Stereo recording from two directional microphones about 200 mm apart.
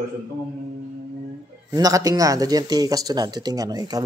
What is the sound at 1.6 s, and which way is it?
Speech, 20° right (ahead or behind).